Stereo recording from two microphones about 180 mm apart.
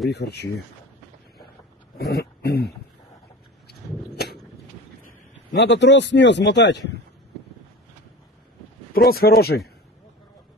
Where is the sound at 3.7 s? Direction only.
60° left (ahead or behind).